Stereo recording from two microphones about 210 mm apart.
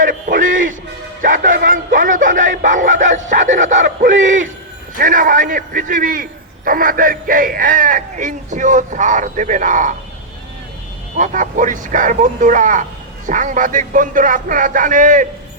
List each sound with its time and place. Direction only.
0.0 s music: 40° right (ahead or behind)
1.2 s a sound: 40° right (ahead or behind)
4.9 s speech: 40° right (ahead or behind)
11.2 s speech: 40° right (ahead or behind)